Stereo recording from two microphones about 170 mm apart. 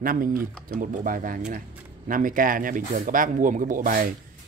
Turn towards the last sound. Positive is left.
turn(degrees=-55)  # may be behind; listen again after turning